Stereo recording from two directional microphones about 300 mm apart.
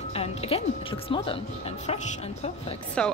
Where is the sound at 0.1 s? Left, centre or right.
Centre.